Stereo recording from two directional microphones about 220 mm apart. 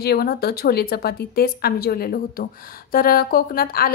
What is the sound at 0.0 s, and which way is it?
A woman's voice, 45° left (ahead or behind).